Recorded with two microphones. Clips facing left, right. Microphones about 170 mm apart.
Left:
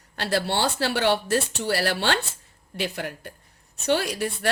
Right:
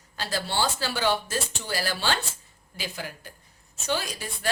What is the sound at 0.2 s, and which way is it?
Speech, 65° left (ahead or behind).